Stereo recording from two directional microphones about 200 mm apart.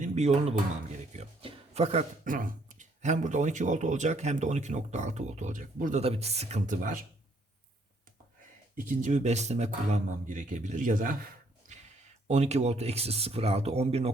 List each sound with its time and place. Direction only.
0.0 s speech: 35° right (ahead or behind)
8.9 s speech: 40° right (ahead or behind)
11.6 s a sound: 40° right (ahead or behind)
12.3 s speech: 35° right (ahead or behind)